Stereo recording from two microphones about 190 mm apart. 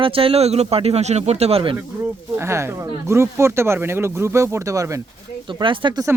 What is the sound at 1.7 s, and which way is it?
Speech, 10° right (ahead or behind).